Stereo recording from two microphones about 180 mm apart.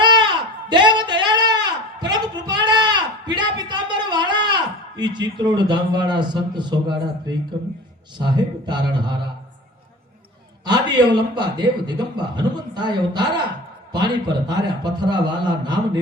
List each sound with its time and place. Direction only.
0.0 s a sound: 25° right (ahead or behind)
5.4 s a man's voice: 25° right (ahead or behind)
10.7 s a man's voice: 25° right (ahead or behind)